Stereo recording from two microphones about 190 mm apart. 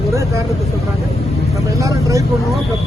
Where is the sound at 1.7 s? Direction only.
15° right (ahead or behind).